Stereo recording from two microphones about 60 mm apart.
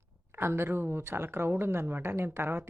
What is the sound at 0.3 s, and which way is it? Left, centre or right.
Speech, right.